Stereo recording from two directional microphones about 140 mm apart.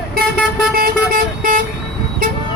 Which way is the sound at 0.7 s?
90° right.